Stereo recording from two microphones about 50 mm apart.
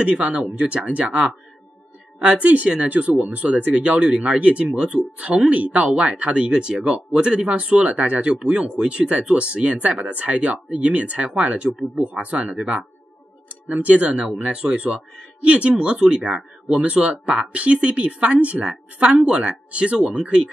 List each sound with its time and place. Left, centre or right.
0.0 s speech: right